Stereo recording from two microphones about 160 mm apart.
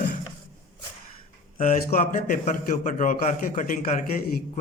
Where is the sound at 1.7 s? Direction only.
55° left (ahead or behind).